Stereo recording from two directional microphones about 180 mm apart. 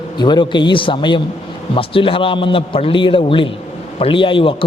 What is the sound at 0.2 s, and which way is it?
A man's voice, 25° left (ahead or behind).